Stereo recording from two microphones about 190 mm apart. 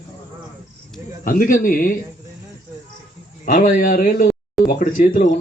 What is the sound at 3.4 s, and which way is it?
Speech, 40° left (ahead or behind).